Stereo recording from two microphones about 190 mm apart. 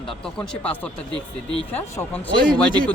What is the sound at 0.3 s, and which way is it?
Speech, 5° left (ahead or behind).